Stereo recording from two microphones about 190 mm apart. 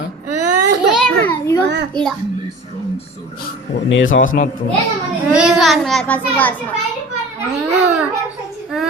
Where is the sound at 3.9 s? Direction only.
85° left.